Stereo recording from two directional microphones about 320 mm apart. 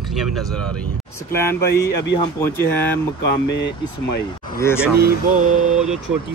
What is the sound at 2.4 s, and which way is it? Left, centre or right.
Speech, centre.